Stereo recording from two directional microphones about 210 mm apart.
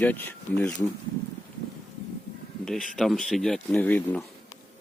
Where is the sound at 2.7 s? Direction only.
Centre (ahead or behind).